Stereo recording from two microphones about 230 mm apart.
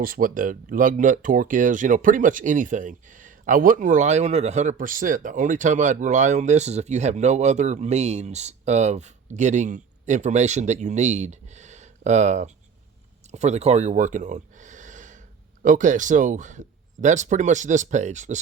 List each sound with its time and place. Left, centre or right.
0.0 s speech: right